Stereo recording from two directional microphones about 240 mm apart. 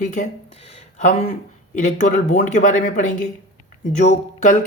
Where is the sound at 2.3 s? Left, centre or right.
Left.